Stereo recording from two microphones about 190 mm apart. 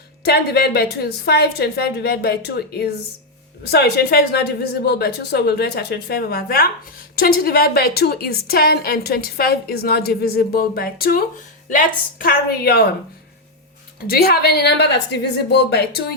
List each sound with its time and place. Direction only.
0.3 s a woman's voice: 55° left (ahead or behind)
14.1 s a woman's voice: 55° left (ahead or behind)